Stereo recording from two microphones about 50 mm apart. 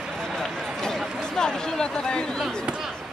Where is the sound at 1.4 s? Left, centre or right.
Centre.